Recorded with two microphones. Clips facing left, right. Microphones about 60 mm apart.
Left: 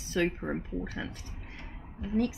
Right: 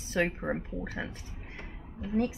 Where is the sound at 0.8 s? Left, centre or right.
Right.